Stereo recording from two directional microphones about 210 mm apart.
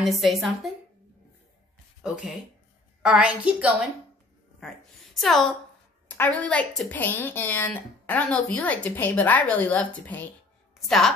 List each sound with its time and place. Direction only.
0.0 s a woman's voice: centre (ahead or behind)
2.0 s a woman's voice: 5° right (ahead or behind)
5.2 s a woman's voice: centre (ahead or behind)